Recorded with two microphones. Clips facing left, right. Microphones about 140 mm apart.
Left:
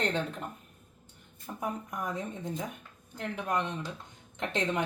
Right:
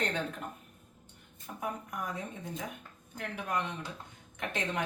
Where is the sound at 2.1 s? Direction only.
25° left (ahead or behind).